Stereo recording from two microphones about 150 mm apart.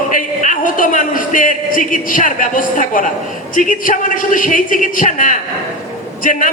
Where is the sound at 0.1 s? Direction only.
60° left (ahead or behind).